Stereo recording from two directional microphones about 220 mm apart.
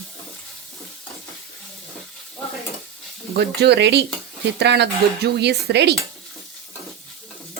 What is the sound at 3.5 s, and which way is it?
Speech, 50° right (ahead or behind).